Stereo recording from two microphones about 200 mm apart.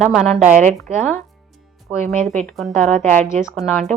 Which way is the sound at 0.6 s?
35° right (ahead or behind).